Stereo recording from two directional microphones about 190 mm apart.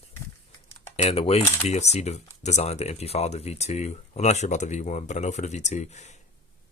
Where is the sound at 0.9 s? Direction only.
30° left (ahead or behind).